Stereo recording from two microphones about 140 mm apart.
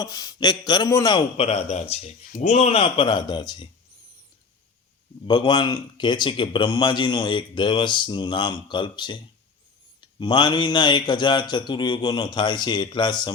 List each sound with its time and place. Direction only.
0.0 s a man's voice: 25° left (ahead or behind)
1.4 s speech: 50° left (ahead or behind); by 3.7 s 30° left (ahead or behind)
5.2 s speech: 35° left (ahead or behind)